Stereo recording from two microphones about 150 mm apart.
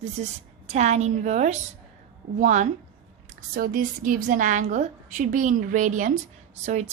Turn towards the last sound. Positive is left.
turn(degrees=-50)  # may be behind; listen again after turning